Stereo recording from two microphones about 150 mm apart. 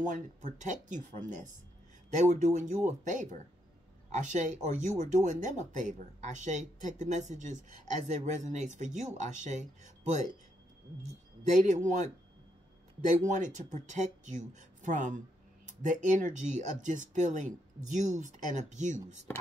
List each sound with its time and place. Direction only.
0.0 s speech: 60° right (ahead or behind)
11.5 s speech: 55° right (ahead or behind)
13.1 s speech: 55° right (ahead or behind)